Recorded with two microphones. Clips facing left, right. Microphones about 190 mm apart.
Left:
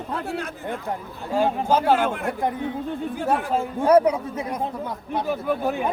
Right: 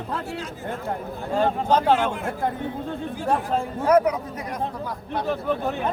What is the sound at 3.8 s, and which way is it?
A man's voice, 30° left (ahead or behind).